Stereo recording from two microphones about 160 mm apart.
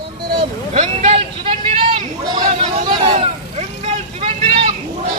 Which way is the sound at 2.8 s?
30° right (ahead or behind).